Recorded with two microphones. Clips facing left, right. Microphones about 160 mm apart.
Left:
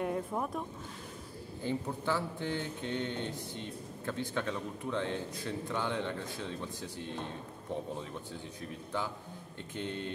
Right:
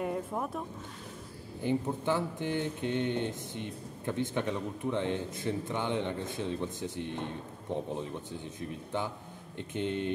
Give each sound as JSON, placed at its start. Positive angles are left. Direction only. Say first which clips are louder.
{"t": 0.0, "sound": "speech", "louder": "even", "side_deg": 0}
{"t": 1.6, "sound": "speech", "louder": "right 5 dB", "side_deg": -15}
{"t": 9.6, "sound": "speech", "louder": "right 6 dB", "side_deg": -20}